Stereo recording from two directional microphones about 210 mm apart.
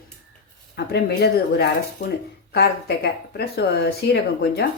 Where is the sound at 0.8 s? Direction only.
50° left (ahead or behind).